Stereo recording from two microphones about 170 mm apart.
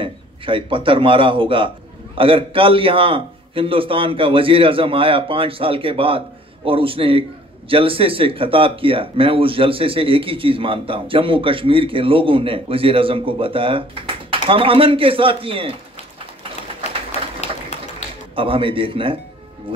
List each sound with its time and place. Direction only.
0.0 s a man's voice: 30° right (ahead or behind)
17.7 s a sound: 40° left (ahead or behind)
18.3 s a man's voice: 30° right (ahead or behind)